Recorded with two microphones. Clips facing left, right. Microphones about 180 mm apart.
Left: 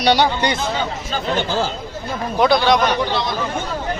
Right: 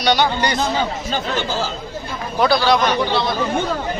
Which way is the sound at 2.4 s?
20° left (ahead or behind).